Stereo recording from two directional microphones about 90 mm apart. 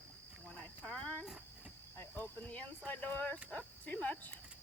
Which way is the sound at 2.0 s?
20° left (ahead or behind).